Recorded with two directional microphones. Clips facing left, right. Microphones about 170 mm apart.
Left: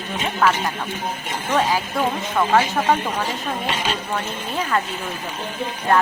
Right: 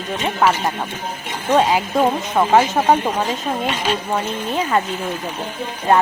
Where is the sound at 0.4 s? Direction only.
20° right (ahead or behind).